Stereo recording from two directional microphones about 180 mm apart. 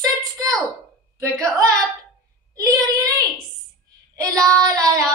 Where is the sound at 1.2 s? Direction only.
15° right (ahead or behind).